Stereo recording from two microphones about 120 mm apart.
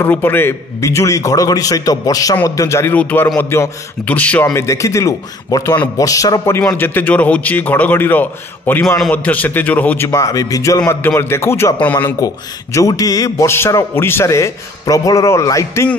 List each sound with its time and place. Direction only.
0.0 s a man's voice: 15° left (ahead or behind)
12.7 s a man's voice: 30° left (ahead or behind)